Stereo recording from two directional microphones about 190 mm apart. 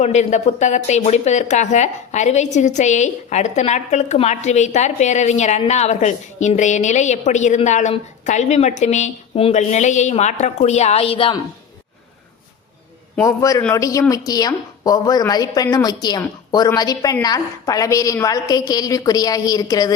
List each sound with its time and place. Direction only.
0.0 s speech: 35° left (ahead or behind)
13.2 s a woman's voice: 15° left (ahead or behind)